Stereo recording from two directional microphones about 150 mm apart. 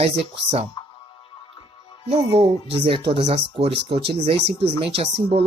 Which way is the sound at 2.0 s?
45° right (ahead or behind).